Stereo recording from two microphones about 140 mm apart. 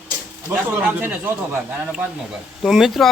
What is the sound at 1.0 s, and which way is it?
Speech, 15° right (ahead or behind).